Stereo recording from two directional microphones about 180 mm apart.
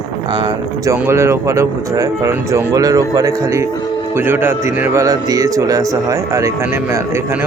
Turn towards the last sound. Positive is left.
turn(degrees=-15)  # may be behind; listen again after turning